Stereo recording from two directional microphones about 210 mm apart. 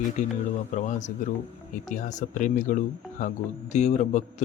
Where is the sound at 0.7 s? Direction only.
35° left (ahead or behind).